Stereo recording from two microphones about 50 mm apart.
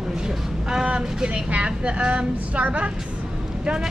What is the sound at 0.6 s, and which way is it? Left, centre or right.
Speech, centre.